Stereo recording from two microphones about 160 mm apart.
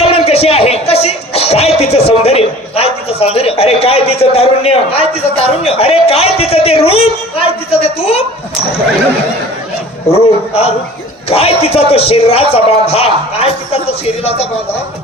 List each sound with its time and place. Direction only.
0.0 s music: 40° left (ahead or behind)
2.0 s a man's voice: 40° left (ahead or behind)
10.1 s a man's voice: 40° left (ahead or behind)